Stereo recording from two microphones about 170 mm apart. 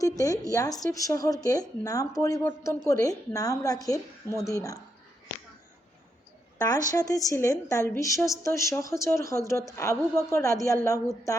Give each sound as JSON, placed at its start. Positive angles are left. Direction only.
{"t": 0.0, "sound": "a sound", "side_deg": 20}
{"t": 0.5, "sound": "speech", "side_deg": 20}
{"t": 6.6, "sound": "a woman's voice", "side_deg": 20}